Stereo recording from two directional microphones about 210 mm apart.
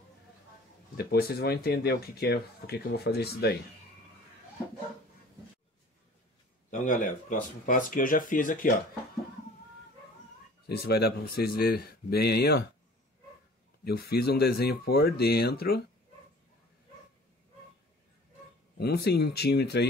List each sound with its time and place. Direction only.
0.9 s speech: 45° left (ahead or behind)
6.7 s speech: 35° left (ahead or behind)
10.7 s speech: 50° left (ahead or behind)
13.8 s speech: 50° left (ahead or behind)
18.8 s speech: 50° left (ahead or behind)